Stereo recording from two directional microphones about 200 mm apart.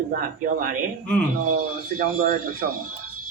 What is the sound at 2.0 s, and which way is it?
Speech, 45° right (ahead or behind).